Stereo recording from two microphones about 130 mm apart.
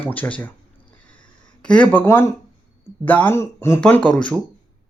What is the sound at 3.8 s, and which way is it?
Speech, 10° left (ahead or behind).